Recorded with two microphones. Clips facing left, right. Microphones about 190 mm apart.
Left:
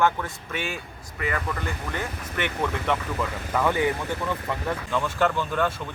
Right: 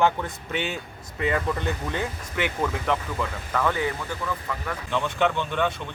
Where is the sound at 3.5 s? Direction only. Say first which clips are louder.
Left 3 dB; 10° left (ahead or behind).